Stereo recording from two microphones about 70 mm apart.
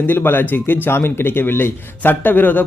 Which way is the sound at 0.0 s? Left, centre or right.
Left.